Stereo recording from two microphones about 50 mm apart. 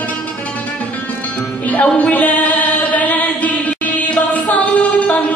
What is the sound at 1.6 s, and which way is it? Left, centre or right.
Music, left.